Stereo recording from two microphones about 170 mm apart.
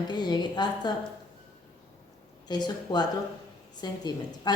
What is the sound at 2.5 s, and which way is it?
A woman's voice, 25° left (ahead or behind).